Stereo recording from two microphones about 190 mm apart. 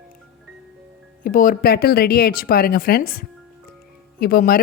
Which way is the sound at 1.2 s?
45° left (ahead or behind).